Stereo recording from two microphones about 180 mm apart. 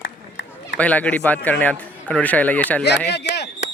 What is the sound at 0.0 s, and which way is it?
Run, 75° left (ahead or behind).